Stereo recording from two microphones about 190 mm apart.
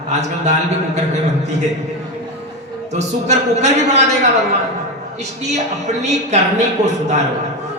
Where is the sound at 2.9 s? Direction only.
35° right (ahead or behind).